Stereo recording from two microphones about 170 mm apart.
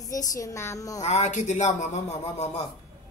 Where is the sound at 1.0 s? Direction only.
45° left (ahead or behind).